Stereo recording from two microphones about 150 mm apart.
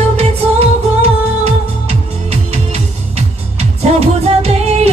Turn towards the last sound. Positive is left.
turn(degrees=-45)  # may be behind; listen again after turning